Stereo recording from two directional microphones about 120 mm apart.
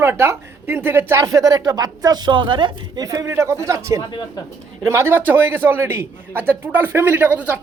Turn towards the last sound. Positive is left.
turn(degrees=-15)  # may be behind; listen again after turning